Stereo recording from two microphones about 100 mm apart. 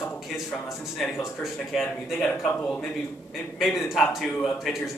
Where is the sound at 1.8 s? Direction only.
20° left (ahead or behind).